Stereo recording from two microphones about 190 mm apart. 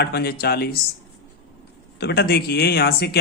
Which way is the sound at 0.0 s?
55° left (ahead or behind).